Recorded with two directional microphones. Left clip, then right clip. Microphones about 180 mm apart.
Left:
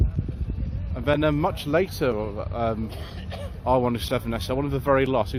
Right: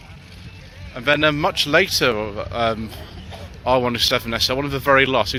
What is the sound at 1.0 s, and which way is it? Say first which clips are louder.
Speech: right 5 dB; 5° left (ahead or behind).